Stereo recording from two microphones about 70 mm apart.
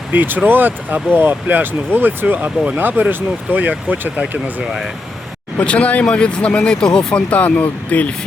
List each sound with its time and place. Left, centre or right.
0.1 s speech: right
4.6 s speech: centre
5.5 s speech: centre